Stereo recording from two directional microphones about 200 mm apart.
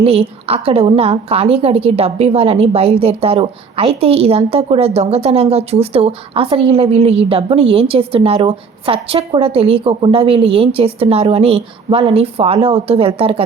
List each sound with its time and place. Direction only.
0.0 s a woman's voice: 30° right (ahead or behind)